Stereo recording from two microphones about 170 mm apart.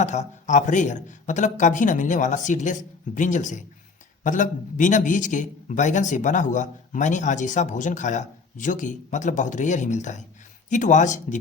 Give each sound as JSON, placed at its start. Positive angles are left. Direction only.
{"t": 0.0, "sound": "a man's voice", "side_deg": 45}